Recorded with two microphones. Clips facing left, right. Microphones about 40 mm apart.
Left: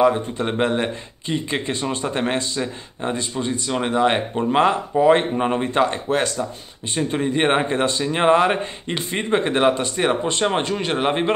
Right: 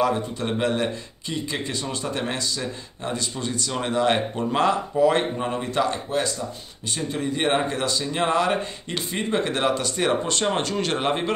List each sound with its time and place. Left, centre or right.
0.0 s speech: left
6.1 s speech: left
6.9 s speech: left; by 11.1 s centre